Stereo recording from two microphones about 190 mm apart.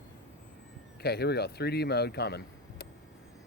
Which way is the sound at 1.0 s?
60° left (ahead or behind).